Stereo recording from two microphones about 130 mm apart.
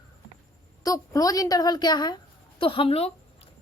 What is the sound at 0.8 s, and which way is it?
A woman's voice, 25° left (ahead or behind).